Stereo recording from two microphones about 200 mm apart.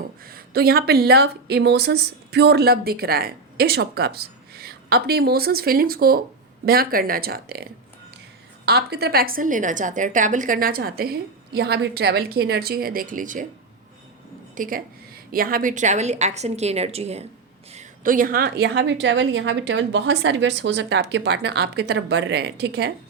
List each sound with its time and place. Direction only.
0.3 s speech: 50° right (ahead or behind)
14.5 s a woman's voice: 40° right (ahead or behind)